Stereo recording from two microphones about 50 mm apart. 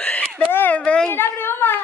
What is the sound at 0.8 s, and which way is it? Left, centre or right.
Speech, centre.